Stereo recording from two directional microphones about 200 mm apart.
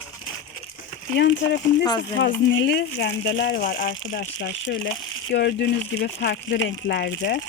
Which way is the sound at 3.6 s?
45° left (ahead or behind).